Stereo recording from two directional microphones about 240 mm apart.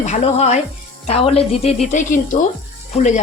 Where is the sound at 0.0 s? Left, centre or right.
Left.